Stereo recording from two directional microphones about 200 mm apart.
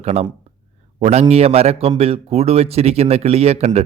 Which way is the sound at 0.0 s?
30° right (ahead or behind).